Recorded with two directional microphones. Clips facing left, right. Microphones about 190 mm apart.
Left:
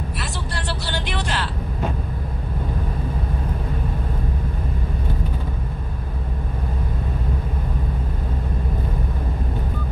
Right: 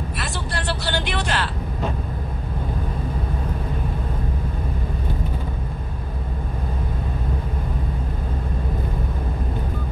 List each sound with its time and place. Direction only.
0.2 s vehicle: 55° right (ahead or behind)